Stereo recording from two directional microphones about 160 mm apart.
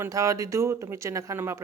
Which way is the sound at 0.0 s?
20° right (ahead or behind).